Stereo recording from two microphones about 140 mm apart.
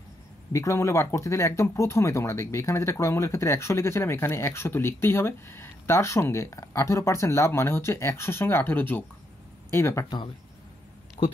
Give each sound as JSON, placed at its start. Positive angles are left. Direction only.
{"t": 0.5, "sound": "speech", "side_deg": 20}
{"t": 10.0, "sound": "speech", "side_deg": 30}
{"t": 11.2, "sound": "speech", "side_deg": 45}